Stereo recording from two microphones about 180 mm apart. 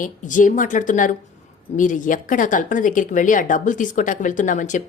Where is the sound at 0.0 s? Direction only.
45° left (ahead or behind).